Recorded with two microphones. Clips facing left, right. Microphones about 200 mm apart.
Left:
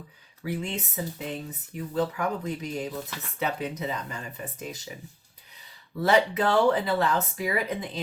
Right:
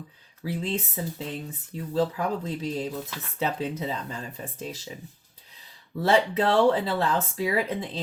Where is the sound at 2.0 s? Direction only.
30° right (ahead or behind).